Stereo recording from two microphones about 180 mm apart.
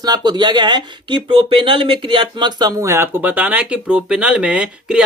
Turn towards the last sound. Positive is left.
turn(degrees=-5)  # may be behind; listen again after turning